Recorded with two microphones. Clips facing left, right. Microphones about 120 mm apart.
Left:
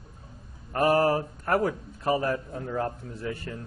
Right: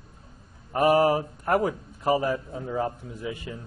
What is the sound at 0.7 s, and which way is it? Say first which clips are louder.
A man's voice: right 2 dB; 15° right (ahead or behind).